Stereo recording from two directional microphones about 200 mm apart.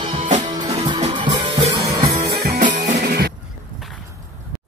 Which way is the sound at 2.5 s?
40° right (ahead or behind).